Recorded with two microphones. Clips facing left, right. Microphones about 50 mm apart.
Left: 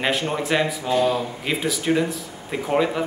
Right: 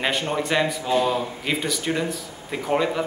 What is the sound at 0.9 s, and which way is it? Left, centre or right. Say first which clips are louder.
Speech: left 1 dB; centre.